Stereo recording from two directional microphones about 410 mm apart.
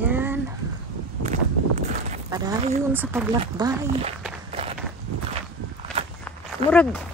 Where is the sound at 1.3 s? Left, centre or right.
Centre.